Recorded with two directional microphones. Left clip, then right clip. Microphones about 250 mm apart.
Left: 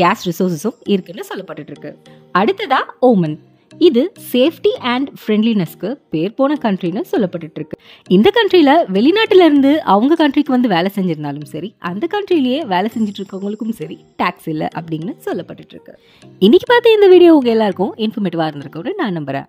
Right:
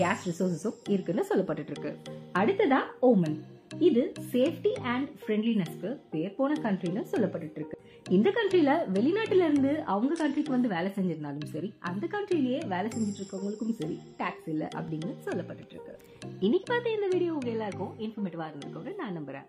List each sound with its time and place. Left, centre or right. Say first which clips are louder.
0.0 s a woman's voice: left 14 dB; left
2.3 s a woman's voice: left 11 dB; left